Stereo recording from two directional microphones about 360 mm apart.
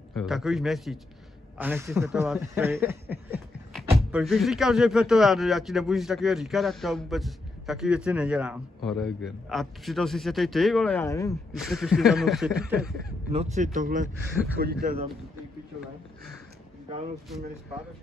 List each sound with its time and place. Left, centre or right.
0.1 s a man's voice: centre
13.3 s speech: centre